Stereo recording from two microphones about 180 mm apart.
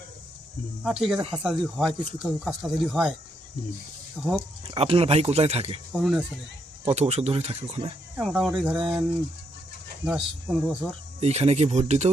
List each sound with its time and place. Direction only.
0.8 s speech: centre (ahead or behind)
4.2 s speech: centre (ahead or behind)
4.7 s speech: 30° right (ahead or behind)
5.9 s speech: 5° right (ahead or behind)
6.8 s speech: 35° right (ahead or behind)
8.1 s speech: centre (ahead or behind)
10.1 s speech: 5° right (ahead or behind)
11.2 s speech: 35° right (ahead or behind)